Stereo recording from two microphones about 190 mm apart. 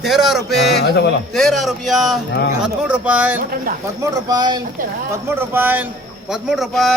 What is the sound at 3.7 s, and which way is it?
Speech, 45° right (ahead or behind).